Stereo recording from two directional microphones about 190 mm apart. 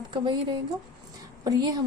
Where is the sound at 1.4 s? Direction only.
20° right (ahead or behind).